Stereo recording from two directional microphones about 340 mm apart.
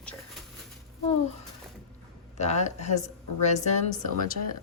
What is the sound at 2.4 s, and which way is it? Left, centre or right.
A woman's voice, centre.